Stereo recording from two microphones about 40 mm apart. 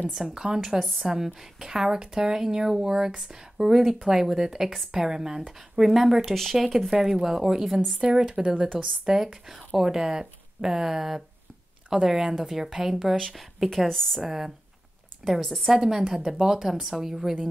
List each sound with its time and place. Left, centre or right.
0.1 s speech: centre
0.6 s speech: centre
6.9 s speech: centre
13.3 s a woman's voice: centre
14.2 s speech: centre
15.4 s speech: centre
15.7 s speech: centre